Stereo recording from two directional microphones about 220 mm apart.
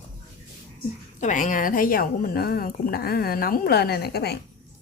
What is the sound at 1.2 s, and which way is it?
A woman's voice, 35° left (ahead or behind).